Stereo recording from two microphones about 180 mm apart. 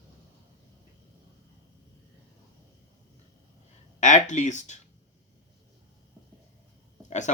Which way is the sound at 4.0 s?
40° left (ahead or behind).